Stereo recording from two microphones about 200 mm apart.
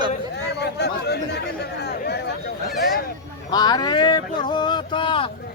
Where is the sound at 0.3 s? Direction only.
55° left (ahead or behind).